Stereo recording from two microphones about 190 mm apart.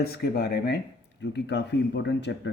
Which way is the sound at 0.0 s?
55° left (ahead or behind).